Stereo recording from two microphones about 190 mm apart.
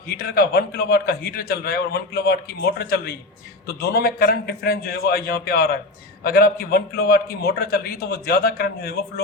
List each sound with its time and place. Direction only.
0.2 s a man's voice: 55° left (ahead or behind)